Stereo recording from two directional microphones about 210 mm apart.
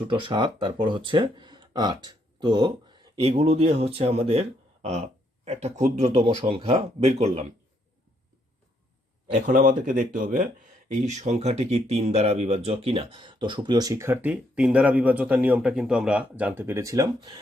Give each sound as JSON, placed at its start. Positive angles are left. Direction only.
{"t": 0.0, "sound": "speech", "side_deg": -25}
{"t": 9.2, "sound": "speech", "side_deg": -40}